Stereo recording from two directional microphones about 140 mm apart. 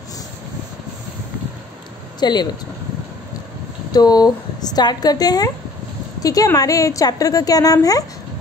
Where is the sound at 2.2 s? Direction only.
30° left (ahead or behind).